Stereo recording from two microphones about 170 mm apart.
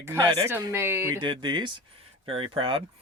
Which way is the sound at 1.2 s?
25° right (ahead or behind).